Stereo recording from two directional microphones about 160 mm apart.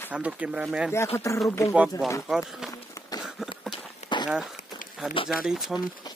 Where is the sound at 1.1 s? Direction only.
20° left (ahead or behind).